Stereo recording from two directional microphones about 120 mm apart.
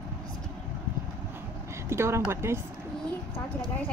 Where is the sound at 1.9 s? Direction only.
20° right (ahead or behind).